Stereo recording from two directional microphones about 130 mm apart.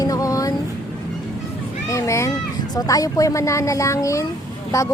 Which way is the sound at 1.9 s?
25° left (ahead or behind).